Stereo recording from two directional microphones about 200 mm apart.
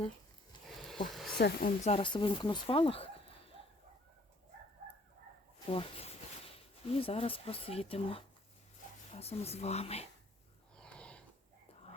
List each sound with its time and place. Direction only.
1.1 s a sound: centre (ahead or behind)
1.4 s speech: 50° left (ahead or behind)
1.8 s speech: 30° left (ahead or behind)
5.6 s speech: 30° left (ahead or behind)
10.8 s wheeze: 5° left (ahead or behind)